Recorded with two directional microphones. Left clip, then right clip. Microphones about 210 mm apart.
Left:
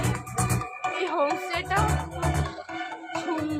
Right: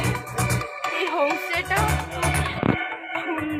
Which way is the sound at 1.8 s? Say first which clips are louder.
Right 3 dB; 55° left (ahead or behind).